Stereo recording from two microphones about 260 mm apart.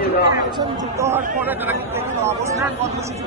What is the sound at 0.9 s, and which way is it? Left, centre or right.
Speech, centre.